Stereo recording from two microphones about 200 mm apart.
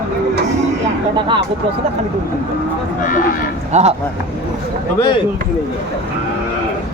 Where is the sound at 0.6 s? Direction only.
30° right (ahead or behind).